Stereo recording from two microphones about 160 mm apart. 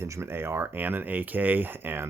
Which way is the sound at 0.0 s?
15° right (ahead or behind).